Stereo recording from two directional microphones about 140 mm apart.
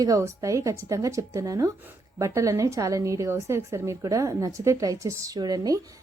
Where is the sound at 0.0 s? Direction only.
25° right (ahead or behind).